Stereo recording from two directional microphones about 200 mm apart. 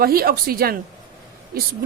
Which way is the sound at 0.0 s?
50° right (ahead or behind).